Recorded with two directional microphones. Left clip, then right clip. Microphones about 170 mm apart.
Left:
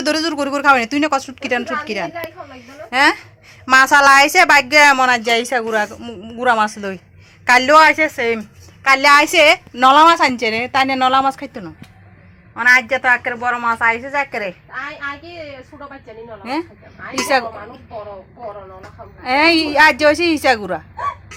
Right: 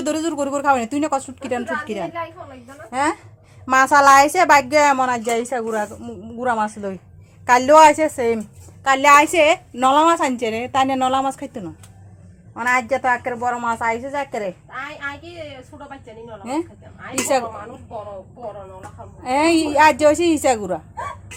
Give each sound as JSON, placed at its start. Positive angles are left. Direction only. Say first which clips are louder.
{"t": 0.0, "sound": "a woman's voice", "louder": "left 4 dB", "side_deg": 0}
{"t": 7.4, "sound": "a woman's voice", "louder": "left 1 dB", "side_deg": -10}
{"t": 8.4, "sound": "a sound", "louder": "left 1 dB", "side_deg": -25}
{"t": 9.0, "sound": "a woman's voice", "louder": "left 1 dB", "side_deg": -5}
{"t": 14.1, "sound": "a woman's voice", "louder": "left 4 dB", "side_deg": -15}
{"t": 16.4, "sound": "a woman's voice", "louder": "left 2 dB", "side_deg": -5}
{"t": 19.2, "sound": "a woman's voice", "louder": "left 4 dB", "side_deg": -5}